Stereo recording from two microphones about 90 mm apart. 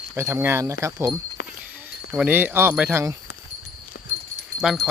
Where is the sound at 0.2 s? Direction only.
30° right (ahead or behind).